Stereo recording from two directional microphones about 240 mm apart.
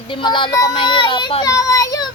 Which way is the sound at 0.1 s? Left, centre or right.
Centre.